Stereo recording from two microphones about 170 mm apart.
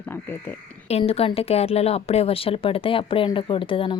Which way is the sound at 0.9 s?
35° left (ahead or behind).